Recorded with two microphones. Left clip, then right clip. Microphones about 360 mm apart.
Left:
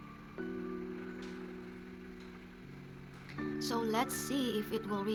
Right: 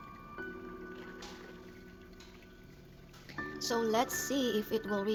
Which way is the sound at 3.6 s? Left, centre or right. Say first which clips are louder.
Right 3 dB; centre.